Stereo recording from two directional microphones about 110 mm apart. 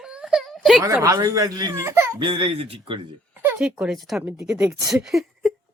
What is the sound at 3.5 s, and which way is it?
Speech, 10° right (ahead or behind).